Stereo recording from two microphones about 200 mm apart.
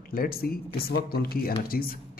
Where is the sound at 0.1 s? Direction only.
50° left (ahead or behind).